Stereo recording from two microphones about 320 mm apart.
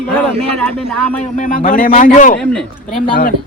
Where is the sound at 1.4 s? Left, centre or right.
Left.